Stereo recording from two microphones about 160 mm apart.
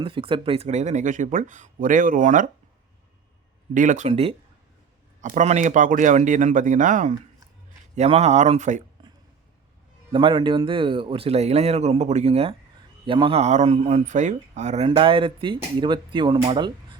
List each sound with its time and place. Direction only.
0.0 s speech: 35° right (ahead or behind); by 2.5 s 55° right (ahead or behind)
3.8 s speech: 50° right (ahead or behind)
4.1 s speech: 35° right (ahead or behind)
5.2 s speech: 50° right (ahead or behind)
7.9 s speech: 40° right (ahead or behind)
10.1 s speech: 30° right (ahead or behind)
14.8 s speech: 30° right (ahead or behind)